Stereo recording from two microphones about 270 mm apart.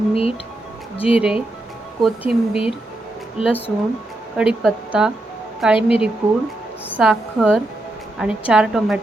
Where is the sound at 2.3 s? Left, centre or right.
Centre.